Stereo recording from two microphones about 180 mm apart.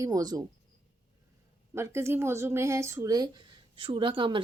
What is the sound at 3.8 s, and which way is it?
Speech, 30° right (ahead or behind).